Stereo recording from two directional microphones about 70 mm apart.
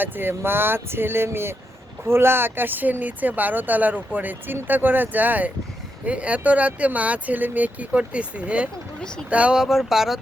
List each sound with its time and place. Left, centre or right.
0.0 s speech: right
9.0 s speech: centre
9.3 s speech: centre